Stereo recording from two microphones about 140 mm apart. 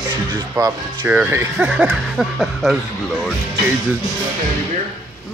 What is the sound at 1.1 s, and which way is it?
Speech, 15° right (ahead or behind).